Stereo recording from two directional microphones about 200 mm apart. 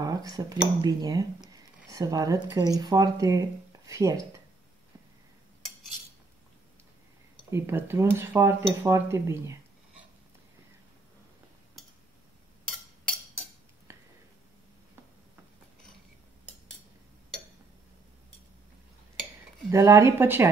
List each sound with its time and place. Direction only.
0.0 s speech: 20° right (ahead or behind)
7.5 s speech: 10° right (ahead or behind)
19.7 s speech: 15° right (ahead or behind)